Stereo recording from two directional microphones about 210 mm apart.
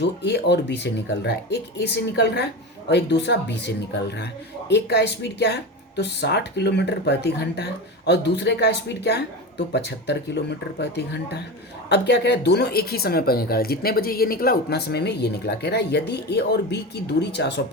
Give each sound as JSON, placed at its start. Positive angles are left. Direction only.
{"t": 0.0, "sound": "speech", "side_deg": 55}